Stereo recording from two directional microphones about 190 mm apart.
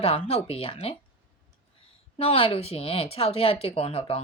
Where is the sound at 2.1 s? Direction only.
30° left (ahead or behind).